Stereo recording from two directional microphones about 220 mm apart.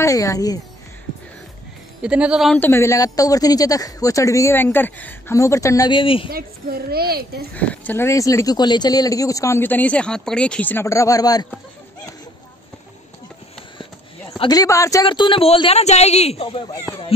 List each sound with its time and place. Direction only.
0.0 s a woman's voice: 15° left (ahead or behind)
2.0 s a woman's voice: 5° right (ahead or behind); by 6.2 s 25° left (ahead or behind)
6.3 s a child's voice: 45° right (ahead or behind)
7.5 s a woman's voice: 5° left (ahead or behind)
14.4 s speech: 15° left (ahead or behind)